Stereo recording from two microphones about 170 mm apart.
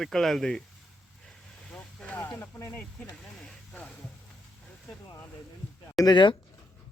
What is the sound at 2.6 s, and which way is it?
Speech, 10° left (ahead or behind).